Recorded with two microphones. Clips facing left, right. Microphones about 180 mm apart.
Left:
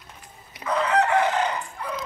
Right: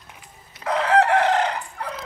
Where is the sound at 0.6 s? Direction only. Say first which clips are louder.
Right 3 dB; 75° right (ahead or behind).